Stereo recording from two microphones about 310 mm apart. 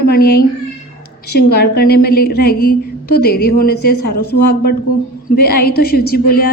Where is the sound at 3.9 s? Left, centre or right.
Left.